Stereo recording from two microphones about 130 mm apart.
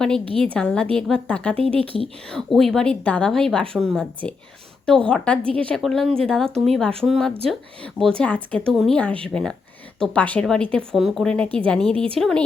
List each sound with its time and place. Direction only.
0.3 s a woman's voice: 10° left (ahead or behind)
9.0 s a woman's voice: 10° left (ahead or behind)